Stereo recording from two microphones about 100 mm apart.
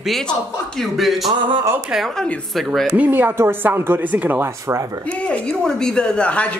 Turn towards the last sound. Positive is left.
turn(degrees=10)  # may be behind; listen again after turning